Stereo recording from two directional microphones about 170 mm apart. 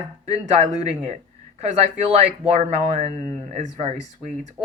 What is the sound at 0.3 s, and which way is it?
Speech, 45° right (ahead or behind).